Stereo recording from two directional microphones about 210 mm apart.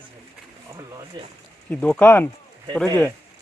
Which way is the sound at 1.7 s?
5° left (ahead or behind).